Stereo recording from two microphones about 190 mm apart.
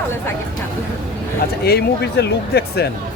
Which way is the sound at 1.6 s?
60° left (ahead or behind).